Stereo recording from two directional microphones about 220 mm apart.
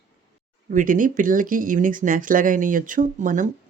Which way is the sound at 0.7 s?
35° right (ahead or behind).